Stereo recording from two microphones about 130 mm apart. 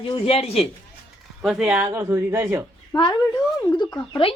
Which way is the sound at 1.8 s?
30° right (ahead or behind).